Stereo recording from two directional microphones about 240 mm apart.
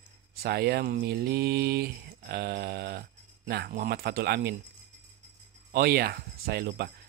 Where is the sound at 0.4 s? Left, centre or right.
Right.